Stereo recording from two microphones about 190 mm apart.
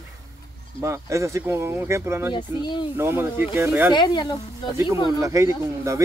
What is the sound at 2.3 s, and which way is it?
Speech, 25° left (ahead or behind).